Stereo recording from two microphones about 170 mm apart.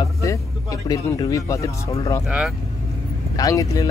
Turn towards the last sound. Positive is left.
turn(degrees=20)  # may be behind; listen again after turning